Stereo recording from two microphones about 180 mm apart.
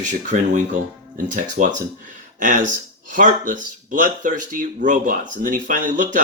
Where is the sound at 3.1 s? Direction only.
45° right (ahead or behind).